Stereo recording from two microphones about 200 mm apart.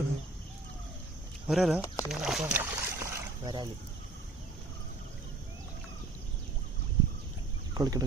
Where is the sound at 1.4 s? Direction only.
Centre (ahead or behind).